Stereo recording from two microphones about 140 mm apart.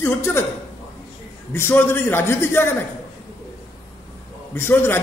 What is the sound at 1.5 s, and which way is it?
A man's voice, 15° left (ahead or behind).